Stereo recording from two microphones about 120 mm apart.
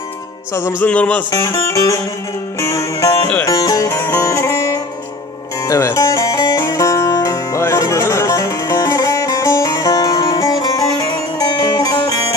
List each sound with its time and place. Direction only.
0.8 s music: 10° left (ahead or behind)
1.3 s music: 25° left (ahead or behind)